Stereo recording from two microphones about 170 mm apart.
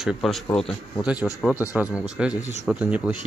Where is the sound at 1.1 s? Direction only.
20° left (ahead or behind).